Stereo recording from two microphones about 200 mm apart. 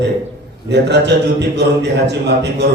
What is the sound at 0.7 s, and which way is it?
A man's voice, 60° right (ahead or behind).